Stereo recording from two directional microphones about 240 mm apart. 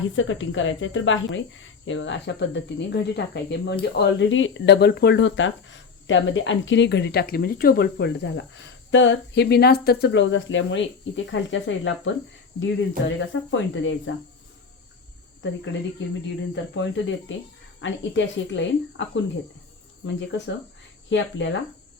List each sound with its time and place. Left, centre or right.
0.2 s speech: left
15.4 s speech: left